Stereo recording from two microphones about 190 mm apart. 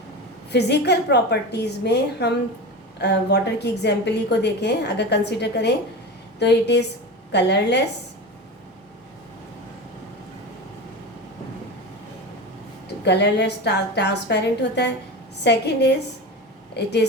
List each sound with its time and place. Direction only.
0.5 s a woman's voice: 60° left (ahead or behind)
13.1 s a woman's voice: 60° left (ahead or behind)